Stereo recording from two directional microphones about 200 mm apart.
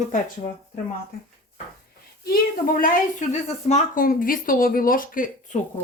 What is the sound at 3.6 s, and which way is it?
Speech, 40° left (ahead or behind).